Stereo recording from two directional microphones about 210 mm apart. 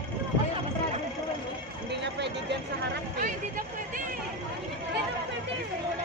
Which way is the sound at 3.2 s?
40° right (ahead or behind).